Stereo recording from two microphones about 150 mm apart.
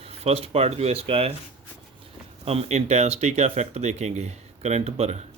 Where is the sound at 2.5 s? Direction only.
45° right (ahead or behind).